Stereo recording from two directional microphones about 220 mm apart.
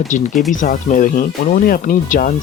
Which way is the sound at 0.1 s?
35° left (ahead or behind).